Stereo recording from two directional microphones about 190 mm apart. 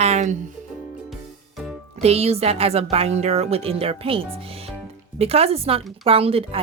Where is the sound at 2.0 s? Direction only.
35° right (ahead or behind).